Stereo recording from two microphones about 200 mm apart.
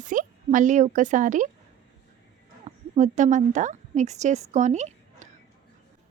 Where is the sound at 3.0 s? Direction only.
40° right (ahead or behind).